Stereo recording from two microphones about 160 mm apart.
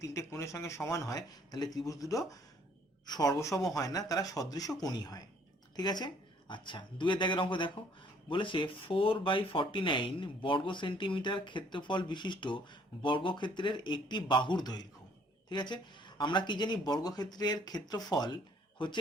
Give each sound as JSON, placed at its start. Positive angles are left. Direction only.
{"t": 0.0, "sound": "speech", "side_deg": 20}